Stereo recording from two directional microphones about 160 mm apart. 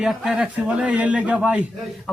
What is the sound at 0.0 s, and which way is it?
A man's voice, 5° right (ahead or behind).